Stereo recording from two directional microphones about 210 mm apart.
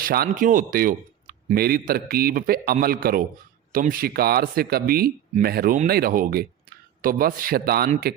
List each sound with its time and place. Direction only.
0.0 s speech: 45° right (ahead or behind)